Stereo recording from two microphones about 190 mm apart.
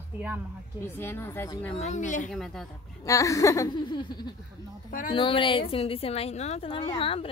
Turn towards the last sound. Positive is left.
turn(degrees=30)  # may be behind; listen again after turning